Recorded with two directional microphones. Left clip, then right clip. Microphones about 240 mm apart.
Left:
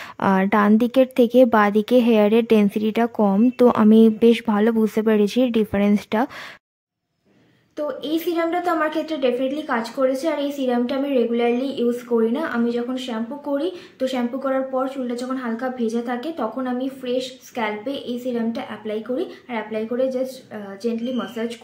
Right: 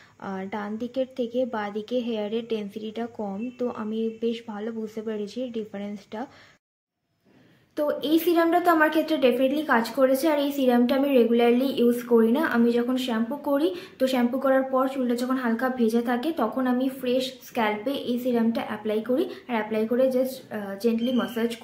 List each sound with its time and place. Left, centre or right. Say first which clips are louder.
0.2 s a woman's voice: left 15 dB; left
7.7 s a woman's voice: right 1 dB; centre